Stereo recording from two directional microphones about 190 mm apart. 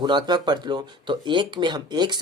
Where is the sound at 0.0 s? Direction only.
20° right (ahead or behind).